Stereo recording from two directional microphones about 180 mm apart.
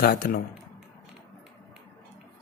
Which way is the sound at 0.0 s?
60° left (ahead or behind).